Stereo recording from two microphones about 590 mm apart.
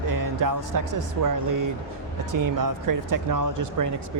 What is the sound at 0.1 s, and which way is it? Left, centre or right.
Speech, right.